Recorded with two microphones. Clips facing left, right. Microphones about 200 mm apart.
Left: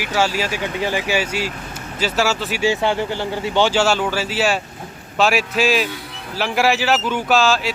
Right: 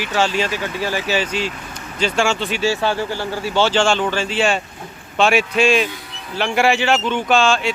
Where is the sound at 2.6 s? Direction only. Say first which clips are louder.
Left 3 dB; 20° left (ahead or behind).